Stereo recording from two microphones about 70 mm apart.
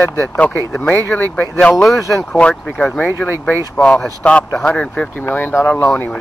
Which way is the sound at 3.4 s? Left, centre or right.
Centre.